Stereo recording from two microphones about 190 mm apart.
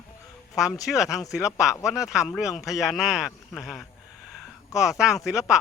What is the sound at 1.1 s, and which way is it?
Speech, 15° left (ahead or behind).